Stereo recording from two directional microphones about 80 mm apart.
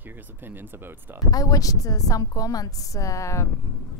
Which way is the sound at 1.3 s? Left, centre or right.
Left.